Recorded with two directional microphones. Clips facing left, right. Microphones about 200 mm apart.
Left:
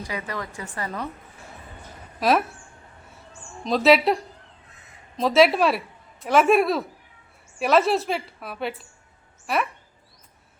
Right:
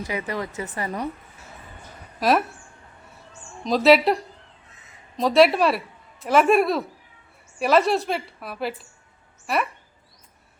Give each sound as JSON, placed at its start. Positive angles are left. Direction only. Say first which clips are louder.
{"t": 0.0, "sound": "speech", "louder": "right 3 dB", "side_deg": -20}
{"t": 2.1, "sound": "speech", "louder": "even", "side_deg": 0}
{"t": 3.6, "sound": "a woman's voice", "louder": "right 1 dB", "side_deg": 0}